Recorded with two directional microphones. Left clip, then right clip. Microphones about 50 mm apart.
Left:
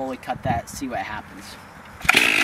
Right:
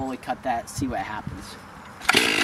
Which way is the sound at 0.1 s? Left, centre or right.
Centre.